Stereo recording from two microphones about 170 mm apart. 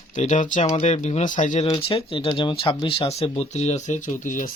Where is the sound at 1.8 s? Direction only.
35° left (ahead or behind); by 4.5 s 50° left (ahead or behind).